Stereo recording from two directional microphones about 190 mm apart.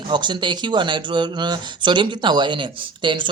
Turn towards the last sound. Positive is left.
turn(degrees=-25)  # may be behind; listen again after turning